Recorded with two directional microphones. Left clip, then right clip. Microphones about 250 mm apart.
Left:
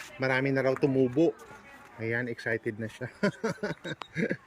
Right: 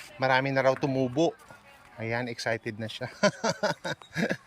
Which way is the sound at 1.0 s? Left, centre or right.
Centre.